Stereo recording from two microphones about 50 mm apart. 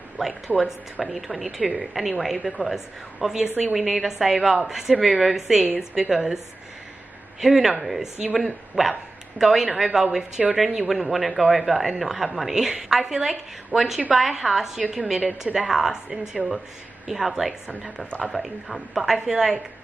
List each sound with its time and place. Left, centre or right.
0.6 s a woman's voice: centre
1.0 s a woman's voice: centre
14.8 s a woman's voice: centre